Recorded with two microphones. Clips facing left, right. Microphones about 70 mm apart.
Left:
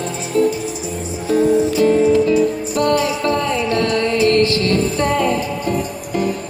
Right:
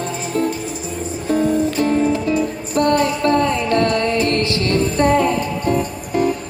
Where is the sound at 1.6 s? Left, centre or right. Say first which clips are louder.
Left 3 dB; right.